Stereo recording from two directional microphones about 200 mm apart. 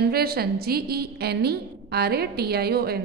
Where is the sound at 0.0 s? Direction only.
50° right (ahead or behind).